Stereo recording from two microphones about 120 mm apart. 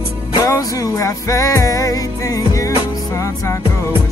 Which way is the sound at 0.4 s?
25° left (ahead or behind).